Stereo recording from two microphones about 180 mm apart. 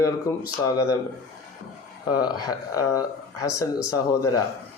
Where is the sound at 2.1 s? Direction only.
20° left (ahead or behind).